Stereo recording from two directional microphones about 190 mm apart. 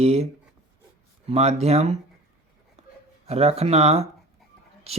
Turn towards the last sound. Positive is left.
turn(degrees=-30)  # may be behind; listen again after turning